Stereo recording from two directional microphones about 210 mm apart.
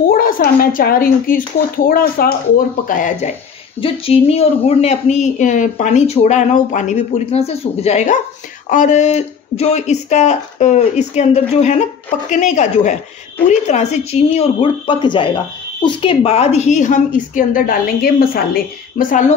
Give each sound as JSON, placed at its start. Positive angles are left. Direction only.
{"t": 0.1, "sound": "speech", "side_deg": 45}